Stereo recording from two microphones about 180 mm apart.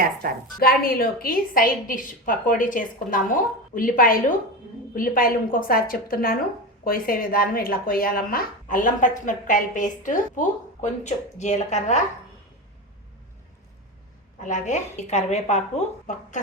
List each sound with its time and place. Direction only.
0.0 s a woman's voice: 55° right (ahead or behind)
0.6 s speech: 55° left (ahead or behind)
14.4 s a woman's voice: 40° left (ahead or behind)